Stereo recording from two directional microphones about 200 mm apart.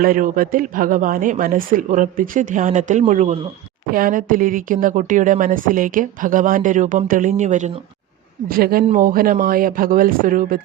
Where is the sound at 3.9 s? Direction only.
45° right (ahead or behind).